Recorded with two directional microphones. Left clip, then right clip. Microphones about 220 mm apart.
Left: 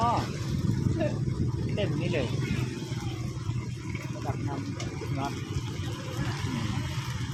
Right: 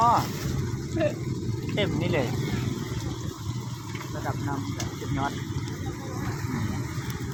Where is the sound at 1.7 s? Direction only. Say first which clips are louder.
Right 4 dB; 10° right (ahead or behind).